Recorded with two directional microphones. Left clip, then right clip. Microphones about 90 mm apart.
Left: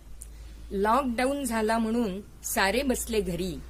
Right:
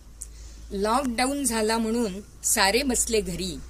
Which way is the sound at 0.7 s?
35° left (ahead or behind).